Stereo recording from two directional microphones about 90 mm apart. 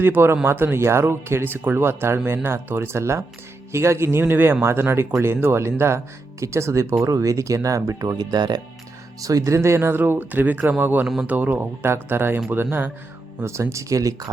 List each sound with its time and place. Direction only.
0.0 s speech: 25° right (ahead or behind); by 8.6 s 50° right (ahead or behind)
9.2 s speech: 40° right (ahead or behind); by 11.0 s 20° right (ahead or behind)
11.0 s speech: 5° right (ahead or behind)
11.3 s speech: 15° right (ahead or behind)
13.4 s speech: 35° right (ahead or behind)